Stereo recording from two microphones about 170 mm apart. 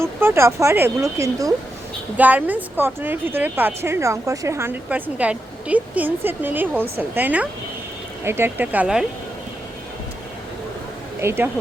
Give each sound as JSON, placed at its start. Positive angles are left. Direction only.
{"t": 0.0, "sound": "a woman's voice", "side_deg": -15}
{"t": 11.2, "sound": "a woman's voice", "side_deg": -15}